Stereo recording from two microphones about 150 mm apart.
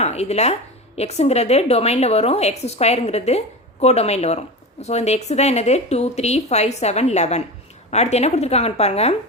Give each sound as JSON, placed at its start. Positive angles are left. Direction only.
{"t": 0.0, "sound": "a woman's voice", "side_deg": 45}